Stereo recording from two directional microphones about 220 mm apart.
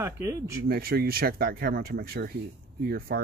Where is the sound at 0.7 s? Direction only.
45° right (ahead or behind).